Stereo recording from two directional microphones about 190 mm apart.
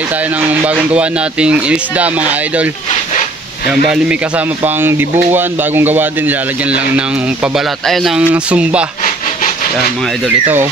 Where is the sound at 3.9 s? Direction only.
5° right (ahead or behind).